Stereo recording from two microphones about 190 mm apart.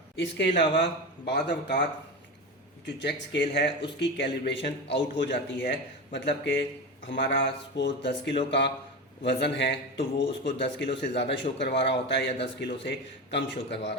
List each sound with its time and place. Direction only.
0.2 s speech: 65° left (ahead or behind)
2.8 s speech: 65° left (ahead or behind)